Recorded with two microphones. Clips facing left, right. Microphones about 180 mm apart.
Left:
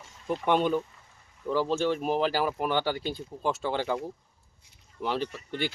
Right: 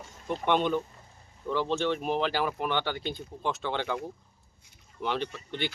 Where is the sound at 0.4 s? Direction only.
5° left (ahead or behind).